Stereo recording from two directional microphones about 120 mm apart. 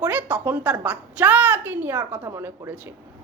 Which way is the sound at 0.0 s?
15° right (ahead or behind).